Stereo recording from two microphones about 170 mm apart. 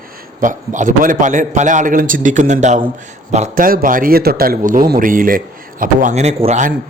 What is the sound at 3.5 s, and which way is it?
A man's voice, 55° right (ahead or behind).